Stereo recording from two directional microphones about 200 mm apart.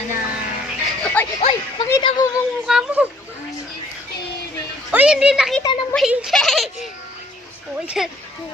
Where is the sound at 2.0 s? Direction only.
20° left (ahead or behind).